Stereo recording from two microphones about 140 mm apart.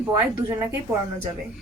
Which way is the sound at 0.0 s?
15° right (ahead or behind).